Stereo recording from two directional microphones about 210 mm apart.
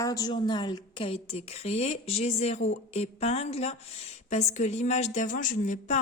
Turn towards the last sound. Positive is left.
turn(degrees=35)  # may be behind; listen again after turning